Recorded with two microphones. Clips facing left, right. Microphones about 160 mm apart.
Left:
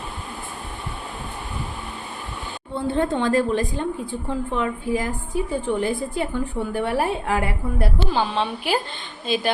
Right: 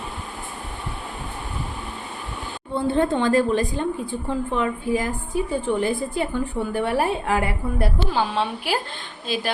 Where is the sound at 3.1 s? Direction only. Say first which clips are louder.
Even; 15° right (ahead or behind).